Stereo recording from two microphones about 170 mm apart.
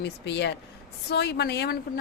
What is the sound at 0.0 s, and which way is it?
Speech, 85° left.